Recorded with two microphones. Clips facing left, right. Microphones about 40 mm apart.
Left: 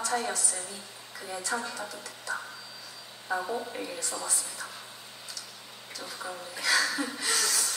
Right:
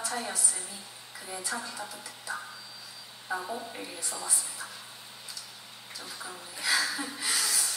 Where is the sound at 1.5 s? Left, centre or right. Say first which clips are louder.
Left 4 dB; centre.